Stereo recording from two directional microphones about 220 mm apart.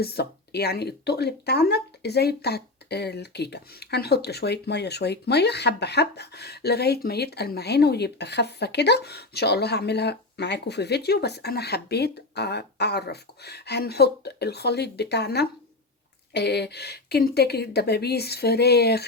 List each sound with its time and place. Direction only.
0.0 s speech: 45° left (ahead or behind)